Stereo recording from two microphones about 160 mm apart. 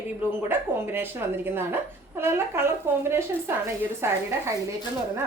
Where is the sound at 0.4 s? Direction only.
15° right (ahead or behind).